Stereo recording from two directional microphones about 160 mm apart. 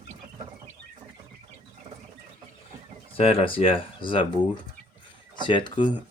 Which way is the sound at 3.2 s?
35° left (ahead or behind).